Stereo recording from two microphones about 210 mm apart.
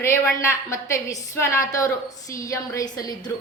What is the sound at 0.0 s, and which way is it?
A woman's voice, 15° left (ahead or behind).